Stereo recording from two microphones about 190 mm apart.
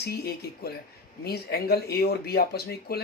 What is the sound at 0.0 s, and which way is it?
Speech, 55° left (ahead or behind).